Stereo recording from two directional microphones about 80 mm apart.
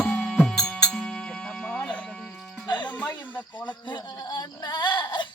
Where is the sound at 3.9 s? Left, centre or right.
Left.